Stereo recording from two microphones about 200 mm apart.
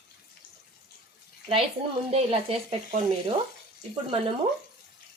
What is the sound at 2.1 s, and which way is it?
Speech, 30° right (ahead or behind).